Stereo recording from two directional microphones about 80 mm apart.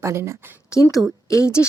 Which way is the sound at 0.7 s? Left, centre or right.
Left.